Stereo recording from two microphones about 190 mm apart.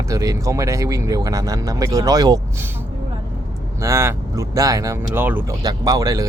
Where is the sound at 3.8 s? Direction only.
15° right (ahead or behind).